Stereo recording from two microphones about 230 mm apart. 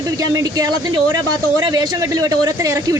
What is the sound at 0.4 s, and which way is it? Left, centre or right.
A woman's voice, centre.